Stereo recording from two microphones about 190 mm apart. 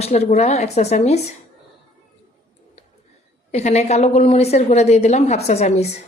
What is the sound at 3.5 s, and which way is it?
A woman's voice, 35° left (ahead or behind).